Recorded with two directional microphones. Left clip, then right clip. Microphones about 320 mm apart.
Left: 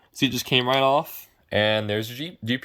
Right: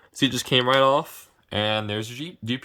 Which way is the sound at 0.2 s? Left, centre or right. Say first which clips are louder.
Right 1 dB; centre.